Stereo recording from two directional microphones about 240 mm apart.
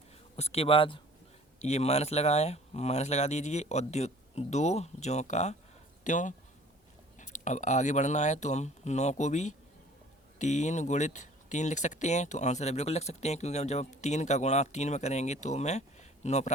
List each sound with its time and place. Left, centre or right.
0.3 s speech: left